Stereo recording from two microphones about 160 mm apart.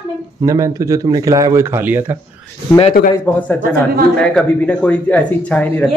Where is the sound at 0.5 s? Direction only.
20° right (ahead or behind).